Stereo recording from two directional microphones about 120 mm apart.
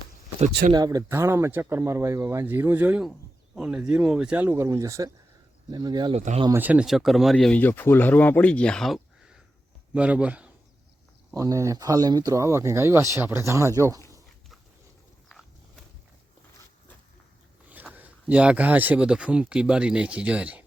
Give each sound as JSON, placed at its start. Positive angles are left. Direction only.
{"t": 0.3, "sound": "speech", "side_deg": -90}
{"t": 0.9, "sound": "speech", "side_deg": -25}
{"t": 6.1, "sound": "speech", "side_deg": -65}
{"t": 6.5, "sound": "speech", "side_deg": -15}
{"t": 6.8, "sound": "speech", "side_deg": 0}
{"t": 7.3, "sound": "speech", "side_deg": 10}
{"t": 11.3, "sound": "speech", "side_deg": -25}
{"t": 15.3, "sound": "a sound", "side_deg": 0}
{"t": 17.9, "sound": "speech", "side_deg": -10}